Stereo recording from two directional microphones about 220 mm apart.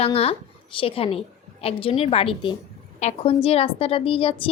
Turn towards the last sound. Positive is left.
turn(degrees=25)  # may be behind; listen again after turning